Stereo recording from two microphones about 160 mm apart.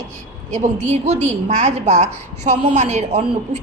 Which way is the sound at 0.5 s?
45° right (ahead or behind).